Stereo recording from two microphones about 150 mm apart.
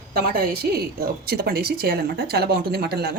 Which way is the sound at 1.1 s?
90° right.